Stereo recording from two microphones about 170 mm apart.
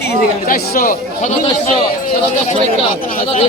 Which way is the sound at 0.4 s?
60° left (ahead or behind).